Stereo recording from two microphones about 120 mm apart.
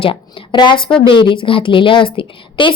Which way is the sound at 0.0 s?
50° left (ahead or behind).